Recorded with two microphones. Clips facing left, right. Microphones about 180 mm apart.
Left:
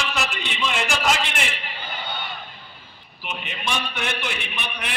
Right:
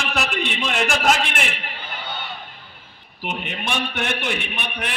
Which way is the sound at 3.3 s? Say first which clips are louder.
Right 2 dB; 55° right (ahead or behind).